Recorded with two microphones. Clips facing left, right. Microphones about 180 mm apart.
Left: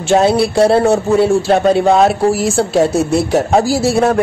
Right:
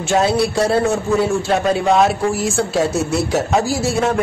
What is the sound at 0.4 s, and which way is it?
A man's voice, 30° left (ahead or behind).